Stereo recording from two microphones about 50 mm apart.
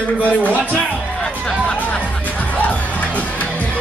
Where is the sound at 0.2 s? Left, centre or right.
Left.